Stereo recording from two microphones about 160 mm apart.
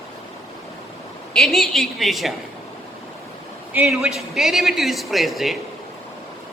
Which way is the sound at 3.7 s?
10° right (ahead or behind).